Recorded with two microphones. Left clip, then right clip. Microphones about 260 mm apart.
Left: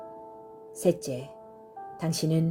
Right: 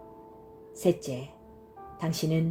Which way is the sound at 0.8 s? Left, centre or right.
Left.